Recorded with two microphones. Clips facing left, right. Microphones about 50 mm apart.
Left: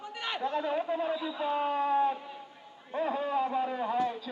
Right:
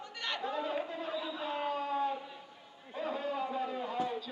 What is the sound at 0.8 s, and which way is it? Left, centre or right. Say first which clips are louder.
Speech: left 8 dB; left.